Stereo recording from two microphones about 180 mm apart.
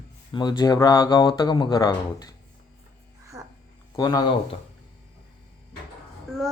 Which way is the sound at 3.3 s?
20° right (ahead or behind).